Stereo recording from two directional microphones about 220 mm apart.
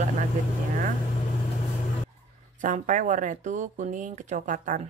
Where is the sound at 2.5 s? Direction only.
35° right (ahead or behind).